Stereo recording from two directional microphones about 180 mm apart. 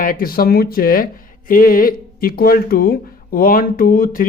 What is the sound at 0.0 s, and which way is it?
Speech, 50° left (ahead or behind).